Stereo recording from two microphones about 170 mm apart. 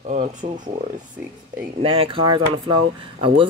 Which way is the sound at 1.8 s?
30° right (ahead or behind).